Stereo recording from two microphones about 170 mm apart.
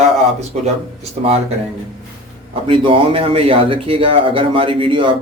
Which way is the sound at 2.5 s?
30° right (ahead or behind).